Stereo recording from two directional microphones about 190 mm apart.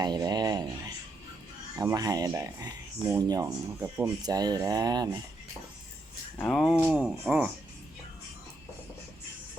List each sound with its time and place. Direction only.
0.0 s speech: 20° right (ahead or behind)
6.4 s speech: centre (ahead or behind)